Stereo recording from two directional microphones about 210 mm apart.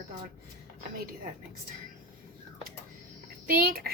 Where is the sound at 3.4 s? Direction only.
45° right (ahead or behind).